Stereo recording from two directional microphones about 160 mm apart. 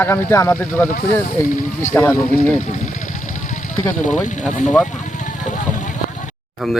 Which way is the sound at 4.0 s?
50° left (ahead or behind).